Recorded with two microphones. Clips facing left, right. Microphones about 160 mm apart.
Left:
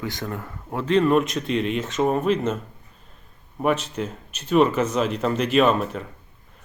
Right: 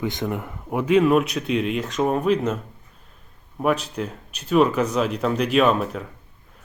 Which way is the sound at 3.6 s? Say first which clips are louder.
Even; centre (ahead or behind).